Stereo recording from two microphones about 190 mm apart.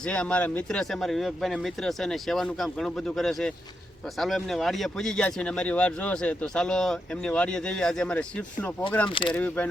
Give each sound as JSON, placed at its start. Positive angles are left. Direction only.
{"t": 0.0, "sound": "speech", "side_deg": 5}
{"t": 9.0, "sound": "speech", "side_deg": 25}
{"t": 9.3, "sound": "speech", "side_deg": 10}